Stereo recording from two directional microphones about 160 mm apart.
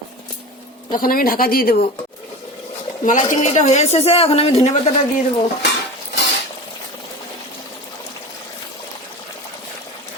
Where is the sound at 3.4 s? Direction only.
45° left (ahead or behind).